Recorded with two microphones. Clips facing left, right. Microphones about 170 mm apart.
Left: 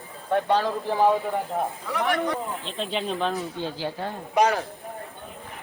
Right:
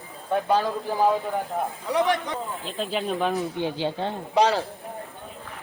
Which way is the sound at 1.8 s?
20° right (ahead or behind).